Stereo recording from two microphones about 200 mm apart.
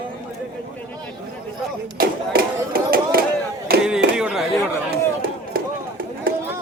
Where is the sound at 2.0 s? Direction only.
45° right (ahead or behind).